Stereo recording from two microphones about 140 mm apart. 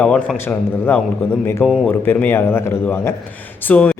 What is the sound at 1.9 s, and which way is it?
Speech, 15° left (ahead or behind).